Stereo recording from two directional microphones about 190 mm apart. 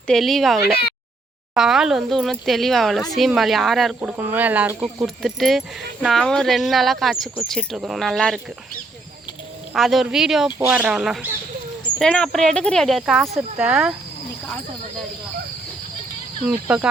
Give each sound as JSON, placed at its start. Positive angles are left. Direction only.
{"t": 0.1, "sound": "speech", "side_deg": 0}
{"t": 0.6, "sound": "speech", "side_deg": 55}
{"t": 1.5, "sound": "speech", "side_deg": -5}
{"t": 5.0, "sound": "speech", "side_deg": 0}
{"t": 9.7, "sound": "speech", "side_deg": 0}
{"t": 16.5, "sound": "speech", "side_deg": -5}